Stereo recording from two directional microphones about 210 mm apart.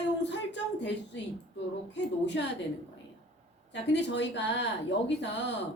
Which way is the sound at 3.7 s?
55° left (ahead or behind).